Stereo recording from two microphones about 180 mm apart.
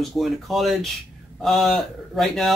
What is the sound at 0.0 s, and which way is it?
Speech, centre (ahead or behind).